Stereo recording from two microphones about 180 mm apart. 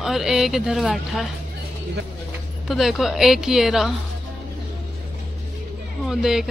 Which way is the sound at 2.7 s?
Centre (ahead or behind).